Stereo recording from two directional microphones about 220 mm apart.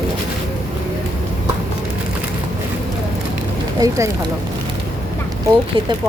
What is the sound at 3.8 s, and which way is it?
Speech, 15° right (ahead or behind).